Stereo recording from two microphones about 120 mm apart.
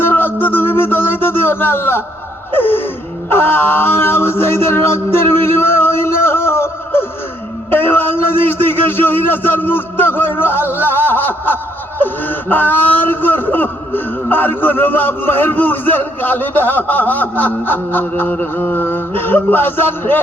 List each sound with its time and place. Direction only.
0.0 s music: 15° left (ahead or behind)
2.5 s a man's voice: 15° left (ahead or behind)